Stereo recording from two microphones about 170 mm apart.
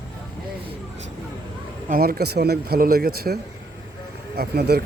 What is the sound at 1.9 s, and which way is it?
Speech, 65° right (ahead or behind).